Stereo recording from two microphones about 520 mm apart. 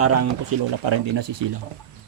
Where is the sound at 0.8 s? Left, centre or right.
Right.